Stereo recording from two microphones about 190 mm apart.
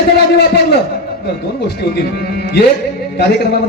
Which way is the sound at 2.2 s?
55° left (ahead or behind).